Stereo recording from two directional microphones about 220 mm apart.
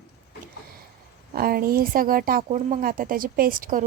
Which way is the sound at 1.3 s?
40° right (ahead or behind).